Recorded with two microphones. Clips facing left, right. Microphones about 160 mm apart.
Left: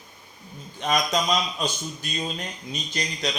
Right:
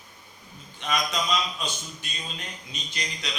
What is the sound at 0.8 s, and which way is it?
Speech, 40° left (ahead or behind).